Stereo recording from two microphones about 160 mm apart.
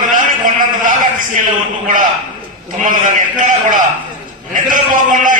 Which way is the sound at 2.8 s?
55° right (ahead or behind).